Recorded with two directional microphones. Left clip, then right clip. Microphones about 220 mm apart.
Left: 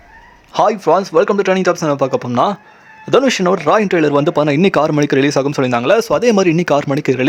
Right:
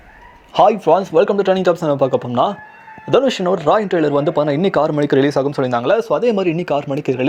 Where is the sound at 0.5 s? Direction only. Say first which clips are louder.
Even; 10° left (ahead or behind).